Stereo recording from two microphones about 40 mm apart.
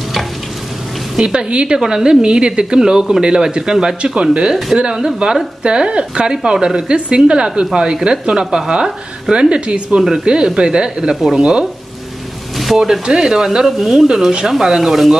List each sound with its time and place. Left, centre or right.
1.1 s a woman's voice: centre
1.5 s speech: right
1.8 s speech: centre
4.5 s speech: centre
4.7 s speech: centre
12.5 s speech: centre